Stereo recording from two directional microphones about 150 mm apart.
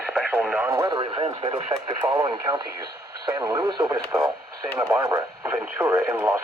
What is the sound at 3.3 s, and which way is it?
Speech, 20° right (ahead or behind).